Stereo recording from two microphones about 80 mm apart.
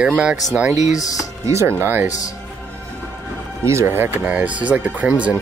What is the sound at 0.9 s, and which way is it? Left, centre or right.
Speech, left.